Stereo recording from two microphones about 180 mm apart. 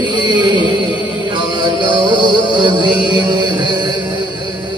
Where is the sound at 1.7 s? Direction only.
25° right (ahead or behind).